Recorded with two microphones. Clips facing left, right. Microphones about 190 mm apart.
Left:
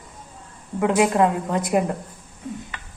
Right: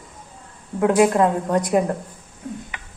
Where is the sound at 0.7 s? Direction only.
Centre (ahead or behind).